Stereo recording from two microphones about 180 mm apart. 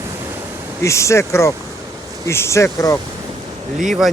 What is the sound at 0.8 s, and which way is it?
Speech, 15° left (ahead or behind).